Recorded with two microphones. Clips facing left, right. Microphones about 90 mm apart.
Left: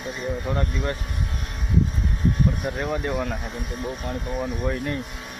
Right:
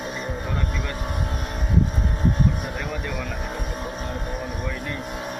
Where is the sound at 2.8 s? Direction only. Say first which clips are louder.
Left 4 dB; 35° left (ahead or behind).